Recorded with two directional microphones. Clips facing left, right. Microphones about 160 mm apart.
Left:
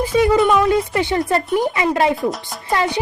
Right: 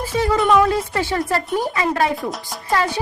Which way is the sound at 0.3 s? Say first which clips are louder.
Right 2 dB; centre (ahead or behind).